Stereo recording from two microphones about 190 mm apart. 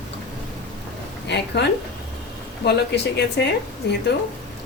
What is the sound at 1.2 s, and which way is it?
Speech, 65° left (ahead or behind).